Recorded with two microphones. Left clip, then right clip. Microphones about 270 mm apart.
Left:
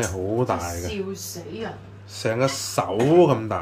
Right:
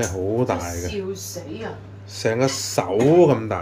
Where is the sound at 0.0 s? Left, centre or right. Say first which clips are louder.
Right 2 dB; centre.